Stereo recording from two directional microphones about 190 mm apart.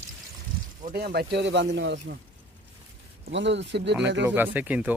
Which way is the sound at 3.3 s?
70° right (ahead or behind).